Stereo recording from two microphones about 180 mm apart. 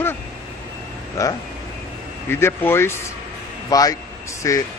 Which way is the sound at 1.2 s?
15° left (ahead or behind).